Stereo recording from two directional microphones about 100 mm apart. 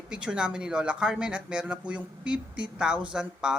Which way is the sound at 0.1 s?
10° right (ahead or behind).